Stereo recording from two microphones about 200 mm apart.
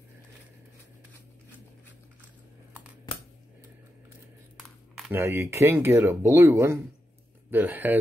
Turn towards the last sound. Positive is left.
turn(degrees=-10)  # may be behind; listen again after turning